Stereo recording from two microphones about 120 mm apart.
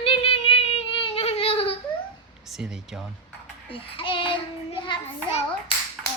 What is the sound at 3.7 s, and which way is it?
Child singing, 50° left (ahead or behind).